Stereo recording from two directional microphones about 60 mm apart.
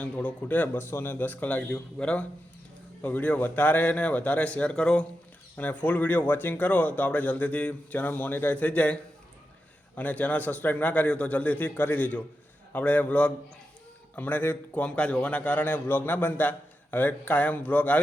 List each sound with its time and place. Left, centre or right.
0.0 s speech: left
0.8 s a man's voice: left; by 5.0 s centre
5.5 s speech: left
14.7 s speech: centre